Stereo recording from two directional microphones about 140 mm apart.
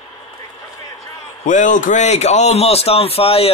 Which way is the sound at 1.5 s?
65° left (ahead or behind).